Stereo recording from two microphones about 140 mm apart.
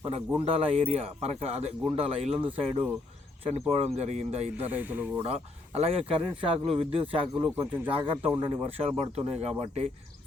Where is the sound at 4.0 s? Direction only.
50° right (ahead or behind).